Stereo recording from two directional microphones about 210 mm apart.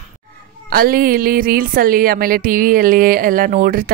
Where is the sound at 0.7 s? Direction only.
45° right (ahead or behind).